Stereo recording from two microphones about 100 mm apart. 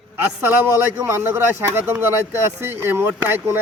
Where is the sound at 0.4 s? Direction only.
20° right (ahead or behind).